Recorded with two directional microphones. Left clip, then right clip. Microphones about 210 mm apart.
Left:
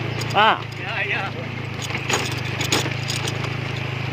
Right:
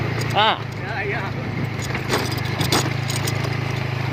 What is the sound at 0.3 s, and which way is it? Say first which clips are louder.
Speech: left 2 dB; 25° left (ahead or behind).